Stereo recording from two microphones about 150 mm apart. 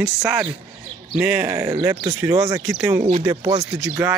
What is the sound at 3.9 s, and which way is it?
Speech, 15° right (ahead or behind).